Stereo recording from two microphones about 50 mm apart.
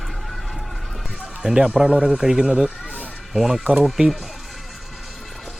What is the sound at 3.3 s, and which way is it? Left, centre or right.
Speech, centre.